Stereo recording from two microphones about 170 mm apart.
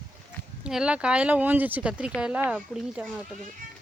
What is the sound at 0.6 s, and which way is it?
Speech, 5° right (ahead or behind).